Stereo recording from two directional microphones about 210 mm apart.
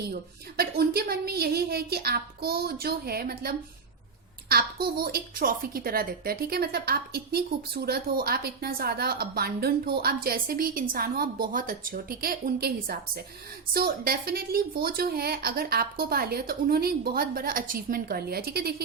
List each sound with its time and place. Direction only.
0.1 s a woman's voice: 45° right (ahead or behind)